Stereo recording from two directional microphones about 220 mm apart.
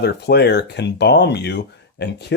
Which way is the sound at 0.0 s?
50° left (ahead or behind).